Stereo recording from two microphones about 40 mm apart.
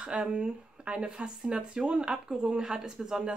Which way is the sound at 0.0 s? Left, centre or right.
Right.